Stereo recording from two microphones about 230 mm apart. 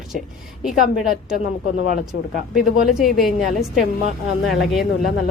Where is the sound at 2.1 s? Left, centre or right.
Left.